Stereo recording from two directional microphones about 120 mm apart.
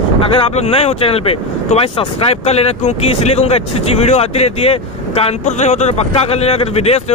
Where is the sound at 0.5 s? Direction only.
60° left (ahead or behind).